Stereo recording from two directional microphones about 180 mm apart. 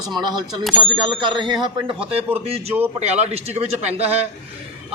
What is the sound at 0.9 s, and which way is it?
A man's voice, 25° right (ahead or behind).